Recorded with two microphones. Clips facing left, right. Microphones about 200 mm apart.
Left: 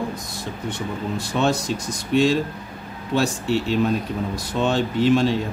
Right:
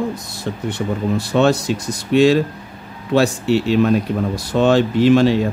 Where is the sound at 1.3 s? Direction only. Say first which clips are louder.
Right 6 dB; 70° right (ahead or behind).